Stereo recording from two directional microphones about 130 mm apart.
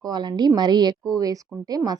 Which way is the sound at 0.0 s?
35° right (ahead or behind).